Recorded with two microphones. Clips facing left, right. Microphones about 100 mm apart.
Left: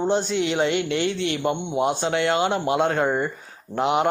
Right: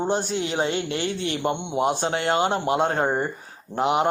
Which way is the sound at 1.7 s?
45° right (ahead or behind).